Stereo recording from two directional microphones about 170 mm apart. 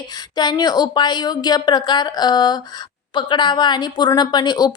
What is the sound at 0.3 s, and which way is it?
A woman's voice, 25° left (ahead or behind).